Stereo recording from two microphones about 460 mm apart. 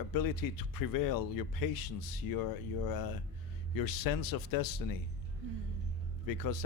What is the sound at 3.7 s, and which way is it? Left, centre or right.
Speech, left.